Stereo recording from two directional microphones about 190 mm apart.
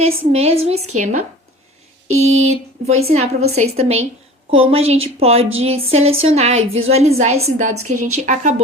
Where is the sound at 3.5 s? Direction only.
35° right (ahead or behind).